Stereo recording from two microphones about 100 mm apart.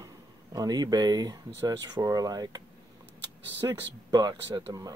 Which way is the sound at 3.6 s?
30° right (ahead or behind).